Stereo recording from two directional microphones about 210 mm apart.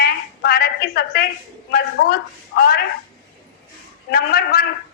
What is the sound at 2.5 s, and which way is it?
Speech, 45° left (ahead or behind).